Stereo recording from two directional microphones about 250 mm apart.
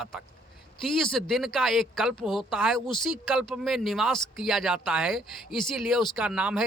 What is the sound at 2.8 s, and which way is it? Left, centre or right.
Speech, centre.